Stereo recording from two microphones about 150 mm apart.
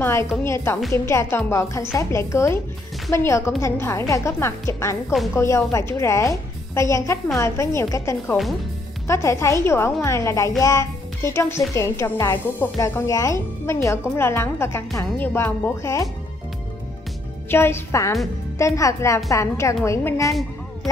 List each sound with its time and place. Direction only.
0.0 s music: 20° left (ahead or behind)
0.4 s a child's voice: 15° left (ahead or behind)
17.5 s speech: 15° left (ahead or behind)